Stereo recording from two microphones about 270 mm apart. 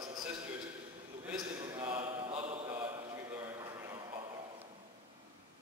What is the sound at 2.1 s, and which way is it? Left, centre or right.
Mantra, right.